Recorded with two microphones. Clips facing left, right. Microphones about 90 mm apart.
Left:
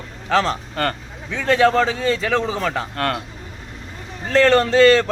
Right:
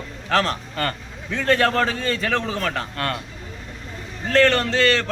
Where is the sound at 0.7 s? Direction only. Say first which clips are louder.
Left 3 dB; 45° left (ahead or behind).